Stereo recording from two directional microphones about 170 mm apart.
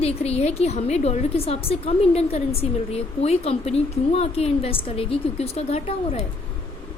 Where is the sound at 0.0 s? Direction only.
35° left (ahead or behind).